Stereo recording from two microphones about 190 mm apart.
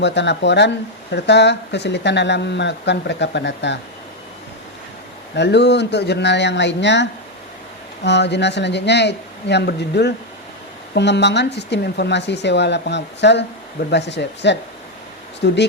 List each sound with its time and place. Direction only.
0.0 s speech: 65° left (ahead or behind)
5.3 s speech: 65° left (ahead or behind)